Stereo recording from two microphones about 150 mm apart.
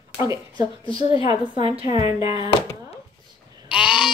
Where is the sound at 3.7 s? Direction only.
5° right (ahead or behind).